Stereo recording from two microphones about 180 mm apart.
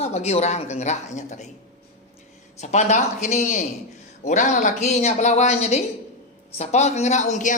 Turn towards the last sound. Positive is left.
turn(degrees=45)  # may be behind; listen again after turning